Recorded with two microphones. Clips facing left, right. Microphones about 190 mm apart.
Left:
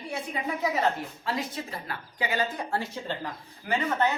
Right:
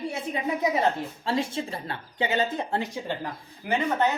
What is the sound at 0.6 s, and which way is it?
A woman's voice, 20° right (ahead or behind).